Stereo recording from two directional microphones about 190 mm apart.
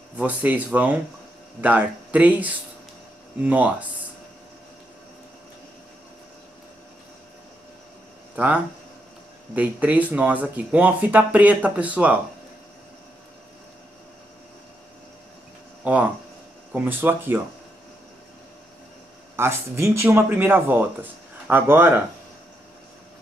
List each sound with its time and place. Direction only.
0.1 s speech: 10° right (ahead or behind)
9.6 s speech: 10° right (ahead or behind)
15.8 s speech: 5° right (ahead or behind)
19.3 s speech: 15° right (ahead or behind)